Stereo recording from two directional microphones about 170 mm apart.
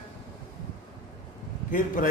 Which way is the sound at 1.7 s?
50° left (ahead or behind).